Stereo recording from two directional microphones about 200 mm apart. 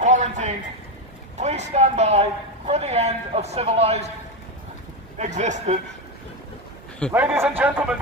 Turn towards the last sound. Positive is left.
turn(degrees=-10)  # may be behind; listen again after turning